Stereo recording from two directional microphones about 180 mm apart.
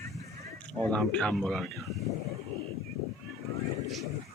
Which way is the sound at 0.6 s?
5° left (ahead or behind).